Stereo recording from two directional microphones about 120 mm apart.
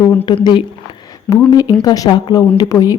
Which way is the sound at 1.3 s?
30° left (ahead or behind).